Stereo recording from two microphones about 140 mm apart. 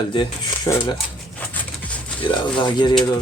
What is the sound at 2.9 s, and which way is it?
Speech, 5° left (ahead or behind).